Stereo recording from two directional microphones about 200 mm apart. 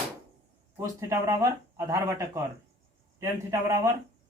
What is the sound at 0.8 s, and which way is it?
Speech, 15° right (ahead or behind).